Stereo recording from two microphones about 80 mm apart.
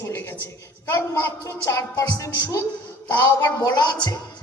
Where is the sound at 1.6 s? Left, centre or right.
Left.